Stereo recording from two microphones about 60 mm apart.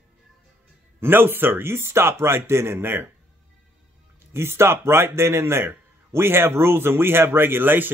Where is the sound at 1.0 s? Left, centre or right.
Right.